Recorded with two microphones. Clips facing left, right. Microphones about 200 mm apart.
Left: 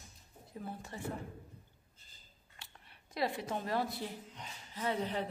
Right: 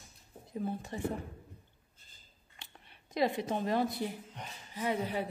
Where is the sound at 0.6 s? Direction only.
20° right (ahead or behind).